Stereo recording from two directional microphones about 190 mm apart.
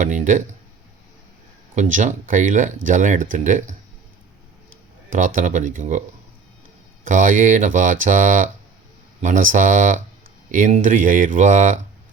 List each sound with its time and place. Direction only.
0.0 s speech: 40° right (ahead or behind)
1.7 s speech: 40° right (ahead or behind)
5.1 s speech: 45° right (ahead or behind)
7.0 s speech: 40° right (ahead or behind)